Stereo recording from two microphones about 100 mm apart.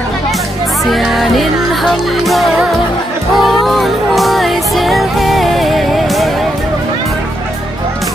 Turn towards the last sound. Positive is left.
turn(degrees=0)  # may be behind; listen again after turning